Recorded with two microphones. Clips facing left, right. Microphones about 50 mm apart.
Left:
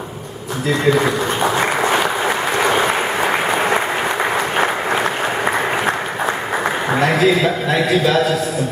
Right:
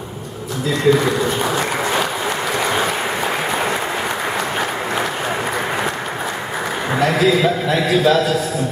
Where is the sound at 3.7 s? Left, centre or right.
Left.